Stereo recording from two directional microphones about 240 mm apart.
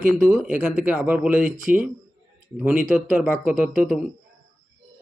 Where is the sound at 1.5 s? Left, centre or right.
Right.